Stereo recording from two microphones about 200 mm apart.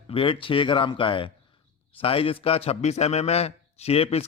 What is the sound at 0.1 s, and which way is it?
A man's voice, 25° left (ahead or behind).